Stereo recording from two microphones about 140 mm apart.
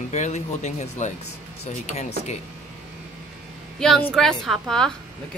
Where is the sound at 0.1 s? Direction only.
55° left (ahead or behind).